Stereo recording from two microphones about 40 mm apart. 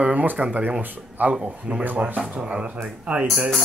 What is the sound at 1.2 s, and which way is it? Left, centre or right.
Speech, right.